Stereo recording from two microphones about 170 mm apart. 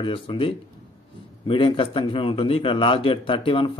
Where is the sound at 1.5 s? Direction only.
30° left (ahead or behind).